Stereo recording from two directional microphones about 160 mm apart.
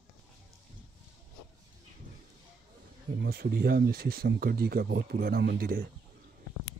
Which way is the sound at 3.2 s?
80° right.